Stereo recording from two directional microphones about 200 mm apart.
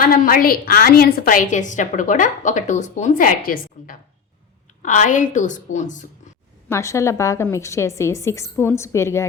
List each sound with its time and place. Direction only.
0.0 s a woman's voice: 45° left (ahead or behind)
6.7 s a woman's voice: 15° left (ahead or behind)